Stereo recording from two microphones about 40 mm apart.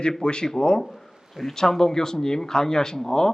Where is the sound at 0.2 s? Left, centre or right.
Left.